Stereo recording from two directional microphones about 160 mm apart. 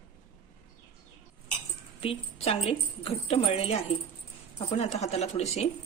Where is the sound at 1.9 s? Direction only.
35° left (ahead or behind).